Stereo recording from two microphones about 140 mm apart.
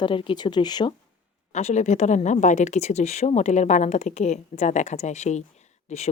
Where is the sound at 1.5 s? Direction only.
55° left (ahead or behind).